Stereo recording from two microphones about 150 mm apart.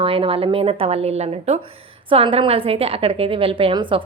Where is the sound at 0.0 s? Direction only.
40° right (ahead or behind).